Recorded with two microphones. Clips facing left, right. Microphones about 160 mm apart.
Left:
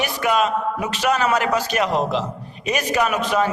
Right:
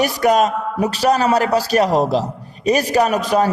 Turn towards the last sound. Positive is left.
turn(degrees=-40)  # may be behind; listen again after turning